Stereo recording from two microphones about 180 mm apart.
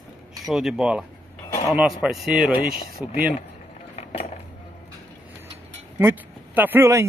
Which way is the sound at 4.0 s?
35° left (ahead or behind).